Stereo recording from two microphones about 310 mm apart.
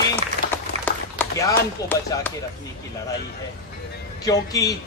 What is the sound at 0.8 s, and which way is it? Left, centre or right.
Speech, centre.